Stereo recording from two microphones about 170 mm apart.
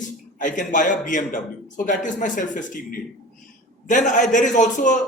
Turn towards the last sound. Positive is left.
turn(degrees=45)  # may be behind; listen again after turning